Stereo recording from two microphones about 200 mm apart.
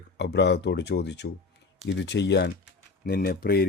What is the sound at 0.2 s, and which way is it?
Speech, 60° left (ahead or behind).